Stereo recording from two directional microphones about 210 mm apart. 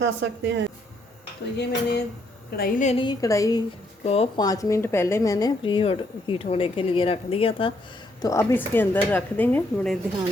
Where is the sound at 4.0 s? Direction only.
30° left (ahead or behind); by 10.0 s 5° left (ahead or behind).